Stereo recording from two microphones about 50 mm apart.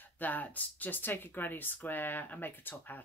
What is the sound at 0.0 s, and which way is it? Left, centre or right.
Speech, left.